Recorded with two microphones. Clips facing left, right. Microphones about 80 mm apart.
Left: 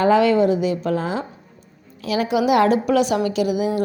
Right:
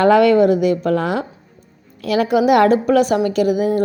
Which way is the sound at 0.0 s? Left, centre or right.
Right.